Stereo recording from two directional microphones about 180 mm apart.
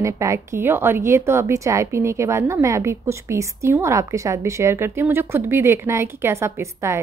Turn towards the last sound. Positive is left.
turn(degrees=-15)  # may be behind; listen again after turning